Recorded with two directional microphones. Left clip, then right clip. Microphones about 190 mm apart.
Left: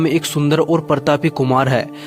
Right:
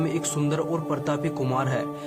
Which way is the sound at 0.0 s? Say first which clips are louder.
Left 9 dB; 40° left (ahead or behind).